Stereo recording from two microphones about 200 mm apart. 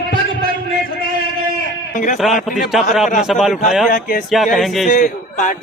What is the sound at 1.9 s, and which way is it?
Speech, 40° left (ahead or behind).